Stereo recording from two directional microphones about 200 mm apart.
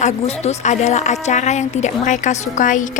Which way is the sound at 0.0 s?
35° left (ahead or behind).